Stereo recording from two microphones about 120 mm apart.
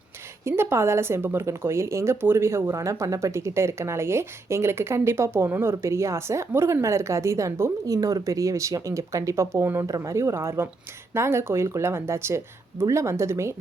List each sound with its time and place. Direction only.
0.4 s a woman's voice: 20° right (ahead or behind)